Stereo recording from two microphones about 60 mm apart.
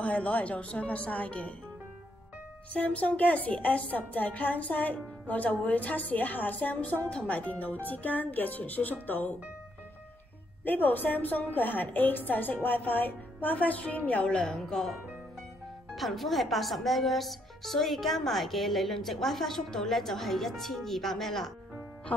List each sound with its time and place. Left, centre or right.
0.0 s music: left
2.7 s music: left
9.0 s a woman's voice: left
10.6 s a woman's voice: left
12.6 s music: left
14.4 s speech: centre